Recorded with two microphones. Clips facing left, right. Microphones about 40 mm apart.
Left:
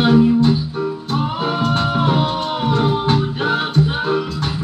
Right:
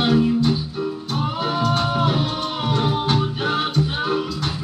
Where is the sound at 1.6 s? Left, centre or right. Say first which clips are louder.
Left 2 dB; left.